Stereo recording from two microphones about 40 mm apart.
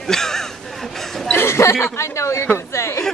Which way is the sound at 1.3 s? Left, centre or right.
Left.